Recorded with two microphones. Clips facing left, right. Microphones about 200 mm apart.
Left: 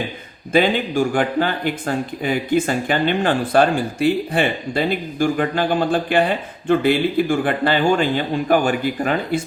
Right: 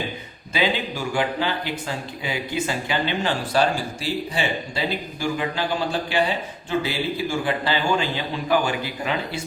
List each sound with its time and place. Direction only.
0.5 s speech: 50° left (ahead or behind)